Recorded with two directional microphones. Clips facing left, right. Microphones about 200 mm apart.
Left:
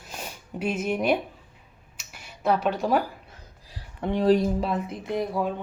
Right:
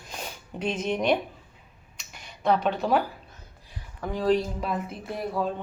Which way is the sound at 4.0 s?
25° left (ahead or behind).